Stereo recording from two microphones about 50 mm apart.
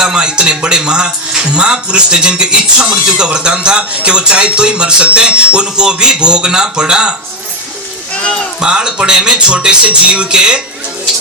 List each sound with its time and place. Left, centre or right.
0.0 s speech: centre
8.1 s a sound: left
8.6 s speech: centre